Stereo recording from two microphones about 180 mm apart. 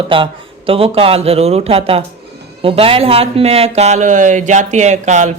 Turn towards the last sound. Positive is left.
turn(degrees=-40)  # may be behind; listen again after turning